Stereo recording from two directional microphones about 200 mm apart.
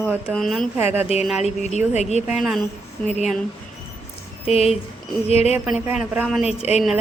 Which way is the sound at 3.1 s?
35° left (ahead or behind).